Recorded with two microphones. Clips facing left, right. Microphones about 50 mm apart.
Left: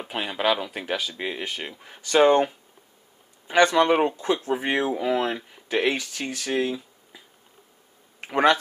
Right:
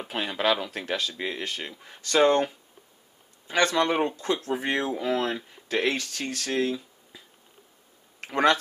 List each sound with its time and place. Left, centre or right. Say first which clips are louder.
0.0 s speech: left 1 dB; centre